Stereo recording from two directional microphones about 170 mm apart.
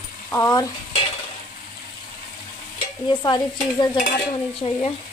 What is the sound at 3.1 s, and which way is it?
Speech, 25° left (ahead or behind).